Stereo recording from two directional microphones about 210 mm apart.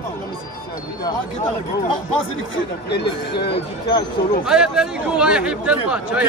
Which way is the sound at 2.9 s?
55° left (ahead or behind).